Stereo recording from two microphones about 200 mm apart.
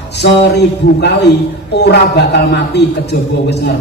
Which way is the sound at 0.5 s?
60° left (ahead or behind).